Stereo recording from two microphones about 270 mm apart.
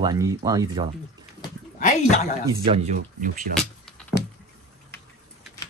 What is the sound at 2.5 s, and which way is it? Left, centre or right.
Speech, right.